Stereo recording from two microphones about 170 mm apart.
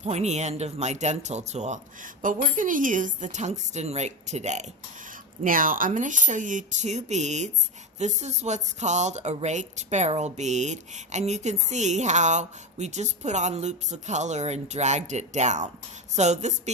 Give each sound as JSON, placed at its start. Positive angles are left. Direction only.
{"t": 0.0, "sound": "speech", "side_deg": -40}
{"t": 5.4, "sound": "speech", "side_deg": -55}